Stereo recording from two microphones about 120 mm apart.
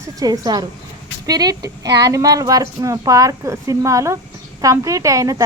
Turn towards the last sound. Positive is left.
turn(degrees=-25)  # may be behind; listen again after turning